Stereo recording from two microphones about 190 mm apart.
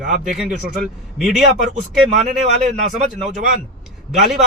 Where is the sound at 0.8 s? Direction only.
Centre (ahead or behind).